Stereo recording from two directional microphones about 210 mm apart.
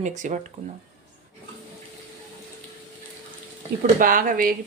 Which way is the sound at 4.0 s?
40° right (ahead or behind).